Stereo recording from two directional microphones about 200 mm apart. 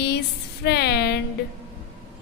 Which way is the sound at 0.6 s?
55° left (ahead or behind).